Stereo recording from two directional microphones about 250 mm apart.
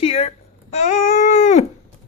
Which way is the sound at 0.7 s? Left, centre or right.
Left.